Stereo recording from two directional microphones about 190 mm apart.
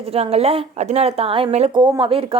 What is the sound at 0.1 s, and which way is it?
A woman's voice, 30° right (ahead or behind).